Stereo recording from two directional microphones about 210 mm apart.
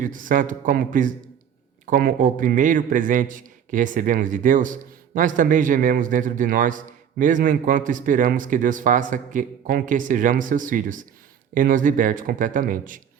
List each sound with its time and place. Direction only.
0.0 s a man's voice: 40° right (ahead or behind)